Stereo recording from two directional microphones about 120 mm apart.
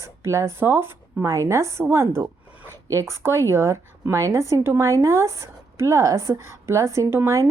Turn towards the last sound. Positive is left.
turn(degrees=-20)  # may be behind; listen again after turning